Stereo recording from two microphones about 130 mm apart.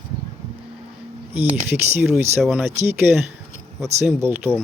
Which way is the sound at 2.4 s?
Centre (ahead or behind).